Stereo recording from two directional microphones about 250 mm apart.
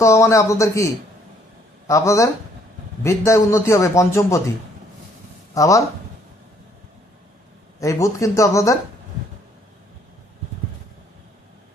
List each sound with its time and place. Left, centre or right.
0.0 s a man's voice: centre
1.9 s a man's voice: centre
5.5 s a man's voice: centre
7.8 s a man's voice: centre